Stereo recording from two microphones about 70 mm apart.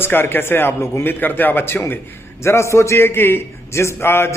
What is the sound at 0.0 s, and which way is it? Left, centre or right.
A man's voice, left.